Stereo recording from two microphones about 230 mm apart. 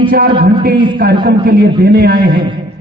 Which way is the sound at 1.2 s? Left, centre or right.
Right.